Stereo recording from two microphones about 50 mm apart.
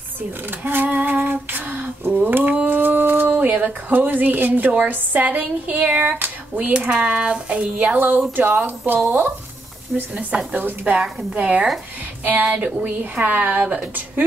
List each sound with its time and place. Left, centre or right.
0.5 s a woman's voice: right
0.8 s female singing: right
2.5 s a sound: right
3.3 s a woman's voice: right
6.1 s a sound: right
6.7 s a woman's voice: right
10.5 s a woman's voice: right
11.0 s a woman's voice: centre